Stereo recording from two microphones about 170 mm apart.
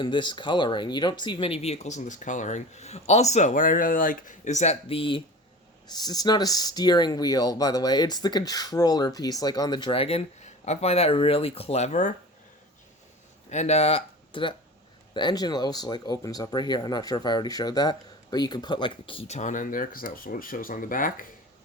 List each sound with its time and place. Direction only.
0.0 s speech: 25° left (ahead or behind); by 12.1 s 45° left (ahead or behind)
13.5 s speech: 40° left (ahead or behind)